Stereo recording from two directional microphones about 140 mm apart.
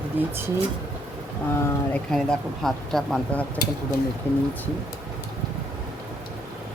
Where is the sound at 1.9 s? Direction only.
5° left (ahead or behind).